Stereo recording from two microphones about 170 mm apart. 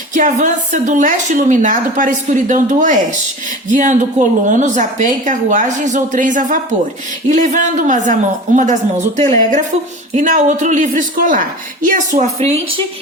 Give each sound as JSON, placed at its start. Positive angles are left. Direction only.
{"t": 0.1, "sound": "a woman's voice", "side_deg": -45}